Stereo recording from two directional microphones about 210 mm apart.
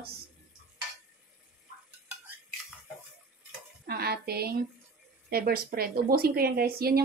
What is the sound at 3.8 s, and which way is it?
Speech, 50° right (ahead or behind).